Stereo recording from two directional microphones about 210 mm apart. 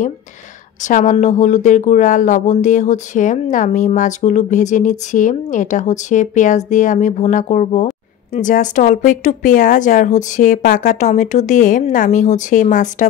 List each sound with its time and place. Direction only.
0.8 s speech: 35° left (ahead or behind)